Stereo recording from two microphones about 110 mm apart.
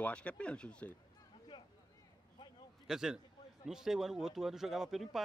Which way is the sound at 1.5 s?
45° left (ahead or behind).